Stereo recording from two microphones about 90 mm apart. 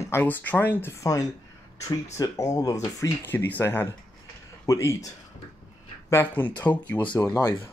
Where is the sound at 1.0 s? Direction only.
40° left (ahead or behind).